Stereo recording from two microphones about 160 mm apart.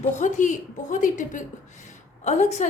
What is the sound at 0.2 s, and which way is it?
A woman's voice, 50° left (ahead or behind).